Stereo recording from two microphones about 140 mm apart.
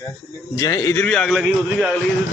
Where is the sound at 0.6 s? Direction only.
20° left (ahead or behind).